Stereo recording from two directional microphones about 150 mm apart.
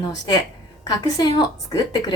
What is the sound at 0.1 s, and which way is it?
A woman's voice, 25° left (ahead or behind).